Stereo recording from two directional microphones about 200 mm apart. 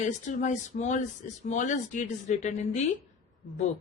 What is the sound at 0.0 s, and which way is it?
Speech, 40° left (ahead or behind).